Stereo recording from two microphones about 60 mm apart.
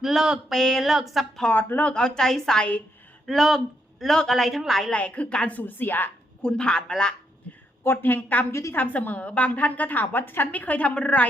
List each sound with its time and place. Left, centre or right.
0.0 s a woman's voice: centre
0.5 s a woman's voice: centre
1.5 s a woman's voice: left
1.9 s a woman's voice: centre
4.9 s a woman's voice: centre
5.5 s a woman's voice: left
6.4 s a woman's voice: centre
7.9 s a woman's voice: left